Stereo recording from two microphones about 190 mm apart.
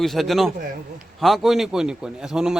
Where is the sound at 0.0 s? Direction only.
Centre (ahead or behind).